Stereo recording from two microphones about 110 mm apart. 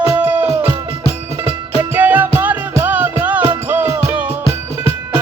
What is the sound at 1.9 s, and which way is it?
Music, 15° right (ahead or behind).